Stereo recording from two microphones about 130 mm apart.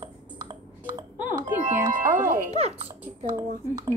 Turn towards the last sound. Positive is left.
turn(degrees=-30)  # may be behind; listen again after turning